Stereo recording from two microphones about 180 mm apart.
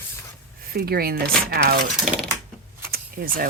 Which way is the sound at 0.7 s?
60° right (ahead or behind).